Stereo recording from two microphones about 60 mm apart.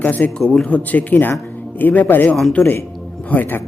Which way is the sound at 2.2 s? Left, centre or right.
Centre.